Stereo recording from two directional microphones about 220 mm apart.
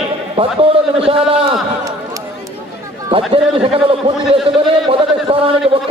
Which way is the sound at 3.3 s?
25° right (ahead or behind).